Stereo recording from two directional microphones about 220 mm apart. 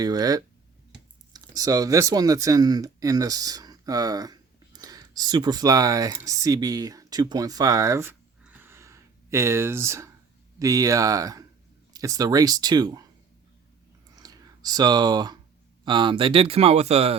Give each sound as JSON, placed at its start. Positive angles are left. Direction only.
{"t": 0.0, "sound": "speech", "side_deg": -15}
{"t": 14.2, "sound": "a sound", "side_deg": -15}
{"t": 15.8, "sound": "speech", "side_deg": -20}